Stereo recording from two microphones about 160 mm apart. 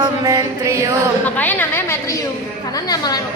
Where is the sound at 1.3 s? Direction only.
10° left (ahead or behind).